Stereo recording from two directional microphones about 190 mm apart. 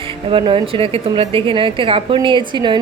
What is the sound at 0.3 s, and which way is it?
A woman's voice, 25° right (ahead or behind).